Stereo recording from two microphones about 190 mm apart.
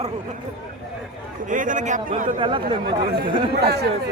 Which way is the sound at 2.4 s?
25° right (ahead or behind).